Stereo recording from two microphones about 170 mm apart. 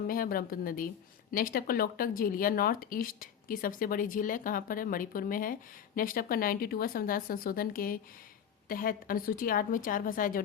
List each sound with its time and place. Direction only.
0.1 s speech: 55° left (ahead or behind)